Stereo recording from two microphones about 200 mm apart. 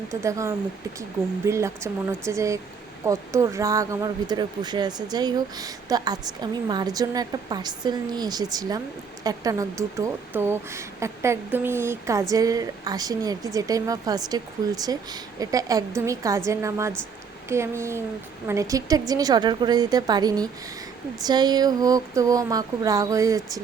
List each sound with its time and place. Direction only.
0.1 s a woman's voice: 15° right (ahead or behind)